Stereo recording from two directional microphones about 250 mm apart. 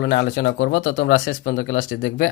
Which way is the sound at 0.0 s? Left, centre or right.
Left.